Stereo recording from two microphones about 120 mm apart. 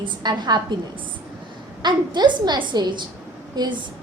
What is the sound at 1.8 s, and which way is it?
A woman's voice, 40° right (ahead or behind).